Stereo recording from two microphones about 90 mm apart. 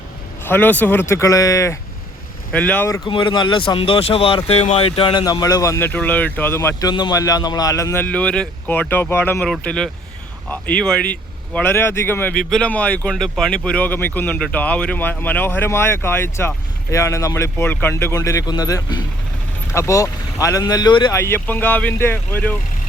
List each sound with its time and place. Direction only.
0.4 s speech: 20° left (ahead or behind)
2.5 s speech: 15° left (ahead or behind)
3.0 s speech: 60° left (ahead or behind)
5.2 s speech: 45° left (ahead or behind)
5.8 s speech: 20° left (ahead or behind)
6.7 s speech: 55° left (ahead or behind)
7.1 s speech: 40° left (ahead or behind)
8.0 s speech: 15° left (ahead or behind)
9.6 s speech: 10° left (ahead or behind); by 12.3 s 25° left (ahead or behind)
12.3 s speech: 5° left (ahead or behind); by 18.1 s 25° left (ahead or behind)
18.1 s speech: 35° left (ahead or behind)
19.7 s speech: 35° left (ahead or behind)
21.1 s speech: 30° left (ahead or behind)